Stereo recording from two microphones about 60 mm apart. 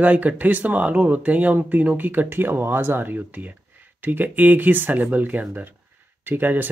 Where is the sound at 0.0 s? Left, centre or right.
Right.